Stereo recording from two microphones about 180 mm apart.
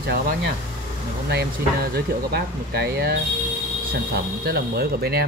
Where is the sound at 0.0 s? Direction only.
60° right (ahead or behind).